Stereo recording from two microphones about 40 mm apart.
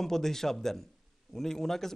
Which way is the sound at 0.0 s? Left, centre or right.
Centre.